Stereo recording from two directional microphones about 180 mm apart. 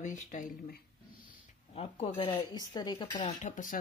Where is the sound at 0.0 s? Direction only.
45° left (ahead or behind).